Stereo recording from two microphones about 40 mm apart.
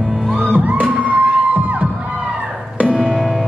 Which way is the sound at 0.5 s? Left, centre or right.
Right.